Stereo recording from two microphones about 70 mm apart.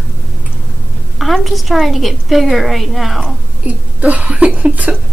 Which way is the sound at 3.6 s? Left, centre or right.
Right.